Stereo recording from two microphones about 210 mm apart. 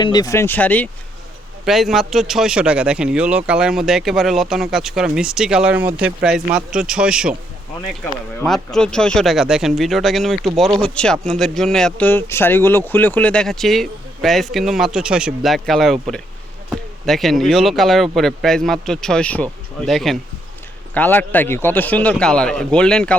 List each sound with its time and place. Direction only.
0.0 s a man's voice: 20° left (ahead or behind); by 7.3 s 5° right (ahead or behind)
8.4 s a man's voice: centre (ahead or behind)